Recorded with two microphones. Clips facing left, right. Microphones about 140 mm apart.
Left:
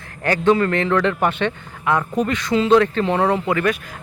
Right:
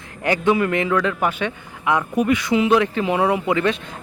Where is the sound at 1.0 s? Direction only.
5° right (ahead or behind).